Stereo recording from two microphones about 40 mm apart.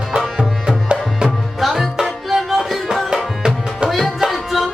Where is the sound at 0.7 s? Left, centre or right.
Right.